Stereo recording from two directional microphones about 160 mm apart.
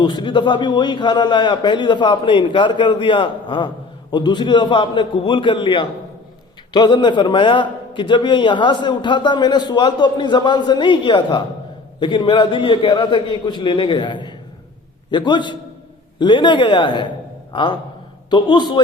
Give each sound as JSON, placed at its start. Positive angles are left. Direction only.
{"t": 0.0, "sound": "a man's voice", "side_deg": 25}